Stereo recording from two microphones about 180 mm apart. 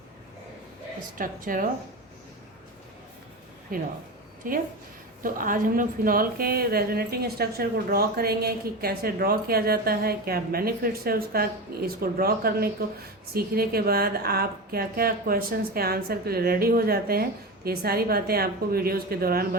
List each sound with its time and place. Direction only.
1.2 s a woman's voice: 50° right (ahead or behind)
3.7 s a woman's voice: 50° right (ahead or behind)